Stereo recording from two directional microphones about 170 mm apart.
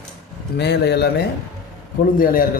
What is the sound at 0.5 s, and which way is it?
Speech, 80° left.